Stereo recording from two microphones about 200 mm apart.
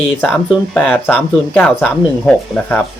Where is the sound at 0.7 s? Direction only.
10° left (ahead or behind).